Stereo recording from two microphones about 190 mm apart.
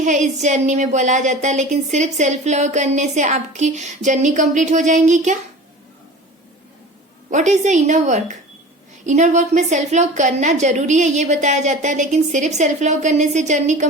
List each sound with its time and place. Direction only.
0.0 s speech: 40° right (ahead or behind)
7.3 s speech: 40° right (ahead or behind)